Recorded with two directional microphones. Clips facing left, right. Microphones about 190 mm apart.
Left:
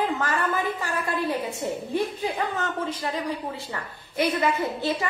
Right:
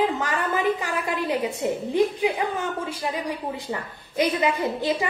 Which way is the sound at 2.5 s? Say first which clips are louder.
Even; 10° right (ahead or behind).